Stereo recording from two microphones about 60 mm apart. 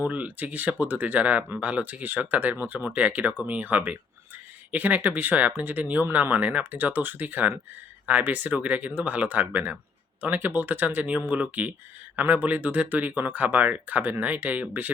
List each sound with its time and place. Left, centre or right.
0.0 s speech: right